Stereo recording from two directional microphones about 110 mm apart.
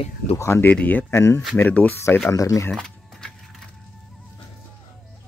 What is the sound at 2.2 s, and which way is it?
Speech, 30° left (ahead or behind).